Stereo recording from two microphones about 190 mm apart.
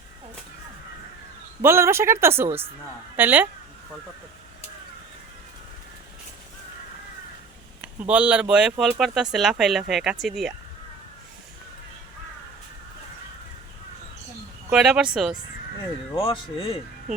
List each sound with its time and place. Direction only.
1.6 s speech: 15° right (ahead or behind)
7.8 s speech: 5° right (ahead or behind)
14.7 s speech: 5° right (ahead or behind)
16.1 s speech: 25° left (ahead or behind)